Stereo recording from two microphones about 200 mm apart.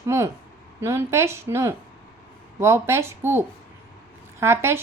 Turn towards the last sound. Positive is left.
turn(degrees=-10)  # may be behind; listen again after turning